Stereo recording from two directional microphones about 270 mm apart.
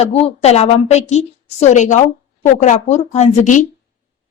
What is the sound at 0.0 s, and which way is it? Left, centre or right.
A woman's voice, left.